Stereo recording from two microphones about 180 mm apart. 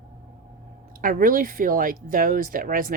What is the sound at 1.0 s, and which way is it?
Speech, 50° right (ahead or behind).